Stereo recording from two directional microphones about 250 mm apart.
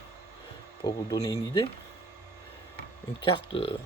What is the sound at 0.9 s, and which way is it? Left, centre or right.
Speech, centre.